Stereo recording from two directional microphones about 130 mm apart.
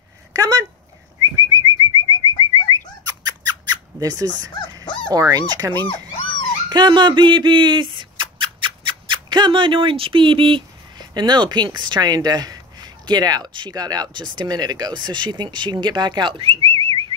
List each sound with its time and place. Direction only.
0.3 s speech: 25° right (ahead or behind)
1.2 s whistling: 30° right (ahead or behind)
2.7 s squawk: 30° right (ahead or behind)
5.1 s speech: 25° right (ahead or behind)